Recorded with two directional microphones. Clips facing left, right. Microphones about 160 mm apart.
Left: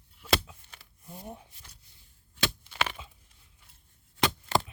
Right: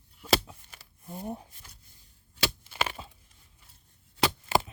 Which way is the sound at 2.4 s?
5° right (ahead or behind).